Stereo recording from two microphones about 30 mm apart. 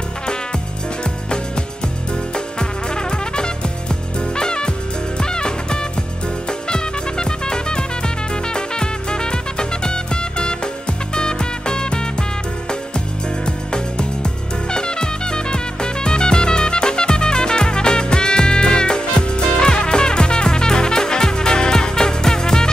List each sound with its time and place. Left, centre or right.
2.3 s music: left
13.5 s music: left